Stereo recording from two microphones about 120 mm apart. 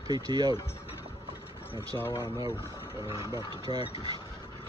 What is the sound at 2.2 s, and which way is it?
Speech, 35° left (ahead or behind).